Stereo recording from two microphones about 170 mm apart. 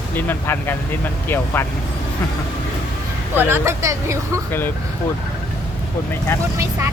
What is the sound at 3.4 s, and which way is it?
Speech, 15° right (ahead or behind).